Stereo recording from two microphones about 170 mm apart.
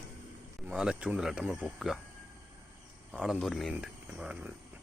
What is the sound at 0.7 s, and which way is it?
Speech, 5° right (ahead or behind).